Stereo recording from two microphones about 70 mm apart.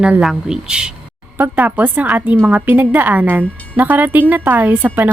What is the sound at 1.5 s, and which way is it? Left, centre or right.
A woman's voice, right.